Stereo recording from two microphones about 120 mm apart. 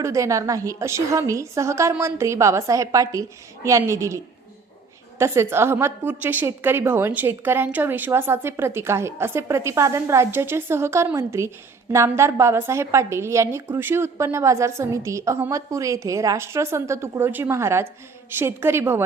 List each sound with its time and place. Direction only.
0.0 s a woman's voice: 25° right (ahead or behind)
5.2 s a woman's voice: 20° right (ahead or behind)